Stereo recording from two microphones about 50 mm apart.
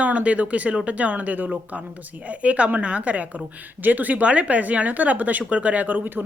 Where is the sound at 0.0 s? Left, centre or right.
Right.